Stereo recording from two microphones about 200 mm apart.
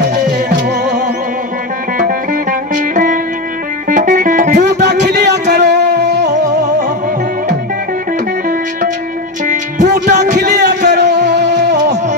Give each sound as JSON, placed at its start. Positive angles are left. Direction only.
{"t": 0.1, "sound": "music", "side_deg": -55}
{"t": 2.7, "sound": "music", "side_deg": -40}
{"t": 4.6, "sound": "music", "side_deg": -55}
{"t": 9.8, "sound": "music", "side_deg": -55}
{"t": 10.4, "sound": "a sound", "side_deg": -55}